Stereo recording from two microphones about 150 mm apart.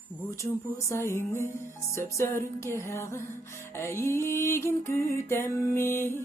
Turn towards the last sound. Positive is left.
turn(degrees=15)  # may be behind; listen again after turning